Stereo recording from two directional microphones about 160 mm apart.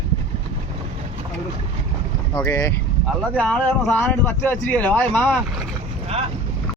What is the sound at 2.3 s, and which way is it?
Speech, 15° left (ahead or behind).